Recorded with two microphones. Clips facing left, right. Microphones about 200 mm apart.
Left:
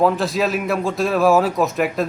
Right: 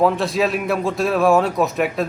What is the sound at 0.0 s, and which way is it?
A man's voice, centre (ahead or behind).